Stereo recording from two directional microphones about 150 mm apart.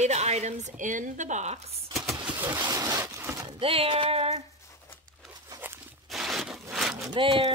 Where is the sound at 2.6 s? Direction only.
25° right (ahead or behind).